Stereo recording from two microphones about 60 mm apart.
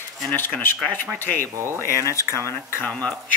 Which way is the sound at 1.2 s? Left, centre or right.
Left.